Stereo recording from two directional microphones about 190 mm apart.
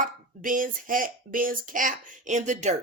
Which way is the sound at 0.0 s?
45° right (ahead or behind).